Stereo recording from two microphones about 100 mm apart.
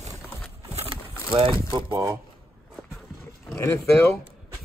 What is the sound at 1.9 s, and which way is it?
Speech, 25° right (ahead or behind).